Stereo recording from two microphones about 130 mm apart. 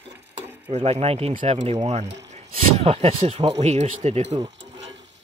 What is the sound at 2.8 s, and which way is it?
Speech, 50° right (ahead or behind).